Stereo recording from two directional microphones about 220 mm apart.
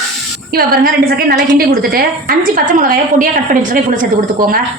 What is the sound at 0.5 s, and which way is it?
A woman's voice, 45° right (ahead or behind).